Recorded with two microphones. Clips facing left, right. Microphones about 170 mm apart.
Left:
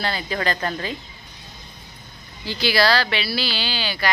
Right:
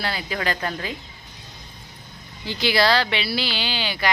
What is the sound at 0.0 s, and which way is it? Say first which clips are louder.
Speech: left 2 dB; 10° right (ahead or behind).